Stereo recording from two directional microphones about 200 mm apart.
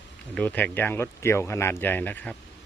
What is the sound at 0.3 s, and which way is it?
Speech, 5° left (ahead or behind).